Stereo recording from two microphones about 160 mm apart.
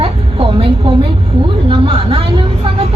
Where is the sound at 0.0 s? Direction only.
35° right (ahead or behind).